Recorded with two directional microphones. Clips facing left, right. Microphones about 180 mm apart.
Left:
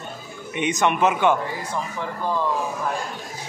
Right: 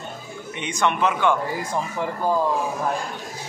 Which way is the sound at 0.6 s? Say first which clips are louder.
Left 2 dB; 15° left (ahead or behind).